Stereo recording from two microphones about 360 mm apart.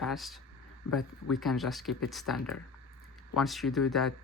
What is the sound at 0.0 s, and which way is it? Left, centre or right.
Speech, centre.